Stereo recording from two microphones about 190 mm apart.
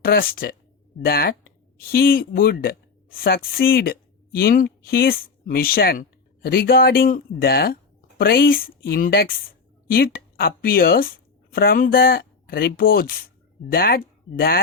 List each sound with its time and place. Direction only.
0.0 s speech: 50° left (ahead or behind)